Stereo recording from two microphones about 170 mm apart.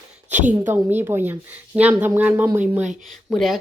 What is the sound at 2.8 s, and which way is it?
Speech, 45° right (ahead or behind).